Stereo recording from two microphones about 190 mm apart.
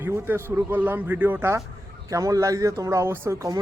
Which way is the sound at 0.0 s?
10° right (ahead or behind).